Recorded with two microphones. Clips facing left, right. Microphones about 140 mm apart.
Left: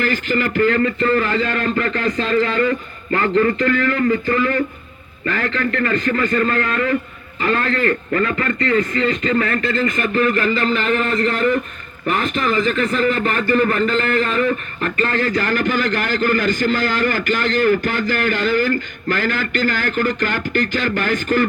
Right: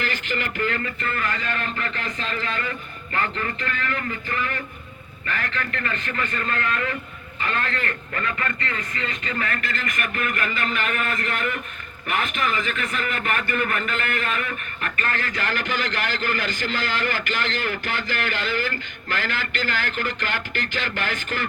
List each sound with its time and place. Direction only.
0.0 s a man's voice: 40° left (ahead or behind)
9.6 s a man's voice: 25° left (ahead or behind); by 21.4 s 45° left (ahead or behind)